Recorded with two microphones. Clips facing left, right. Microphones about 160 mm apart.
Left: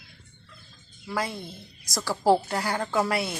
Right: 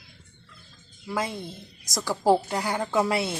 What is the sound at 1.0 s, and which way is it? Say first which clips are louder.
A woman's voice: right 1 dB; 20° right (ahead or behind).